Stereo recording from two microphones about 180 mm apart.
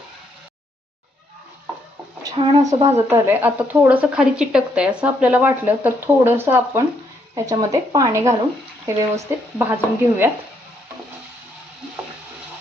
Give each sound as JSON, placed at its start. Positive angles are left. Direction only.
{"t": 2.2, "sound": "speech", "side_deg": -25}
{"t": 3.1, "sound": "a woman's voice", "side_deg": -10}